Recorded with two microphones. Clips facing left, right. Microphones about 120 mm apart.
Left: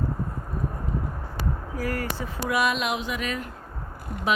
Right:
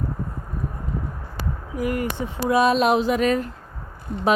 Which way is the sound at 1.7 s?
20° right (ahead or behind).